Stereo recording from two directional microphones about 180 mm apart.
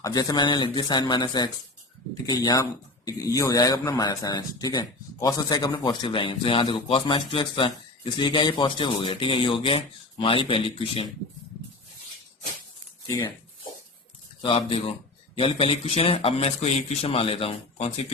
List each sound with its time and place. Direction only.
0.0 s speech: 20° left (ahead or behind)
13.1 s speech: 15° left (ahead or behind)
14.4 s a man's voice: 30° left (ahead or behind)